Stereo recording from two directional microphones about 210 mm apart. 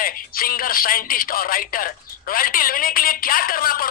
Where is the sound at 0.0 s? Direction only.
45° left (ahead or behind).